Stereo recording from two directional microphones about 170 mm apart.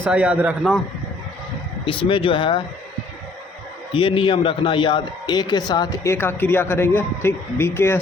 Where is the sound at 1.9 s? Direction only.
30° left (ahead or behind).